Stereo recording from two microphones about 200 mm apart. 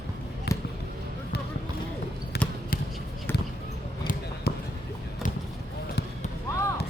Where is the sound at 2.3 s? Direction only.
55° left (ahead or behind).